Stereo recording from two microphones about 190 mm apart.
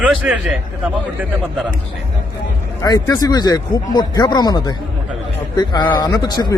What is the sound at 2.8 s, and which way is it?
Speech, 20° left (ahead or behind).